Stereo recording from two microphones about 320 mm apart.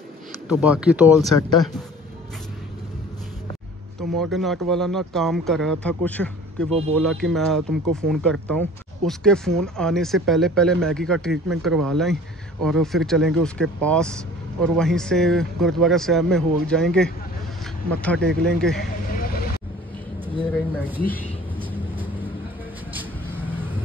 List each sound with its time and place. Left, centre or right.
0.5 s speech: centre
4.2 s speech: centre
19.0 s vehicle: left
20.7 s speech: centre
21.6 s vehicle: centre
23.4 s vehicle: centre